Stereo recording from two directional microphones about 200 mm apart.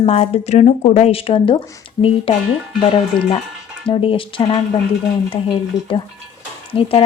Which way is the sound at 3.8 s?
25° left (ahead or behind).